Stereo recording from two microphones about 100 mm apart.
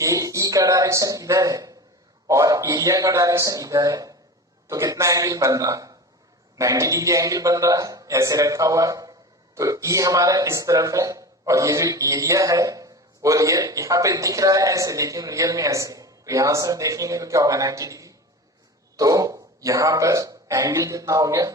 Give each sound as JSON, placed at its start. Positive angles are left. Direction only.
{"t": 0.0, "sound": "a man's voice", "side_deg": -35}